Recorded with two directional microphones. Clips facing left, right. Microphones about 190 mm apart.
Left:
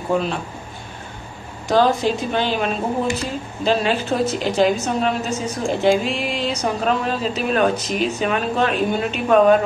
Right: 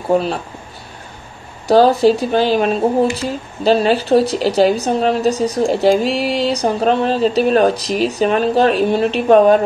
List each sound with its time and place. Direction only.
0.1 s speech: 35° right (ahead or behind)
1.7 s speech: 35° right (ahead or behind)